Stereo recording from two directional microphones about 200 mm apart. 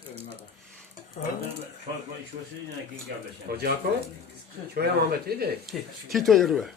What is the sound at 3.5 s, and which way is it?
Speech, 50° right (ahead or behind).